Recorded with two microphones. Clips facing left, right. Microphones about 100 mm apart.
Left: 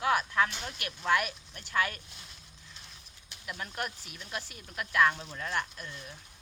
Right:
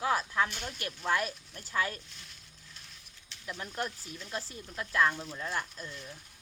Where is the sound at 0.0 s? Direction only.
30° right (ahead or behind).